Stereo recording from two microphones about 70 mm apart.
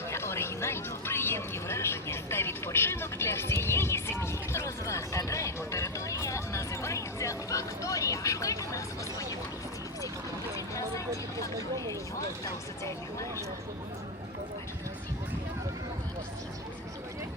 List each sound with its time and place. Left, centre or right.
0.1 s speech: left